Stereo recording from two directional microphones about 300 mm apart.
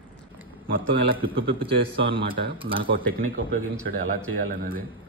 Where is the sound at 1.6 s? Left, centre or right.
Centre.